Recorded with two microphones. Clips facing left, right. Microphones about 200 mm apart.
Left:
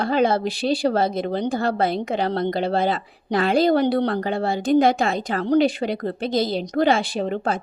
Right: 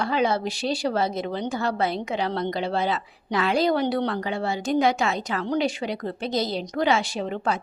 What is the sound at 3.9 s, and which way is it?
Speech, 35° left (ahead or behind).